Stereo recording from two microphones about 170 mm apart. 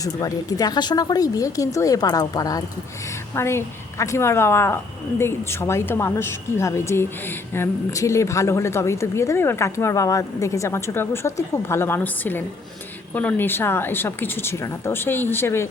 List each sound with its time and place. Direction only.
0.0 s a woman's voice: 20° left (ahead or behind)